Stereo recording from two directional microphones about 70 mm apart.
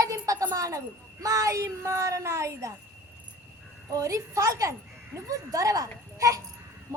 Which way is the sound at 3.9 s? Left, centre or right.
Right.